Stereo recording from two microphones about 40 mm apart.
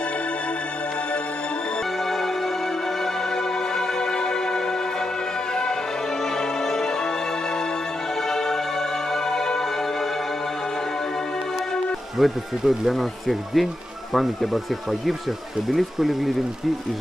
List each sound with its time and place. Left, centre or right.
2.0 s music: centre
3.7 s music: centre
8.3 s music: centre
12.2 s speech: centre